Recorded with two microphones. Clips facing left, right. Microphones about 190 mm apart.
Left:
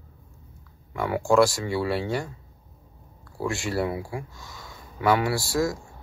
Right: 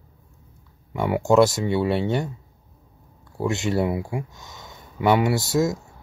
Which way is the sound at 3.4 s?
20° right (ahead or behind).